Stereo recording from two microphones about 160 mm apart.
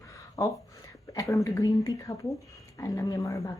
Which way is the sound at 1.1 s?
20° left (ahead or behind).